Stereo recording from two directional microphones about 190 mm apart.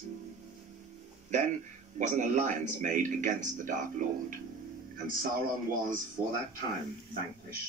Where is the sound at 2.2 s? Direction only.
40° right (ahead or behind).